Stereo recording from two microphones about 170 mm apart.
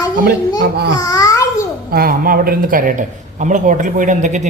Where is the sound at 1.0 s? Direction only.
20° left (ahead or behind).